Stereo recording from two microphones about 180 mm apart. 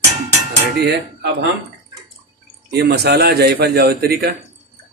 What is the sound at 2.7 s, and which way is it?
A man's voice, 65° right (ahead or behind).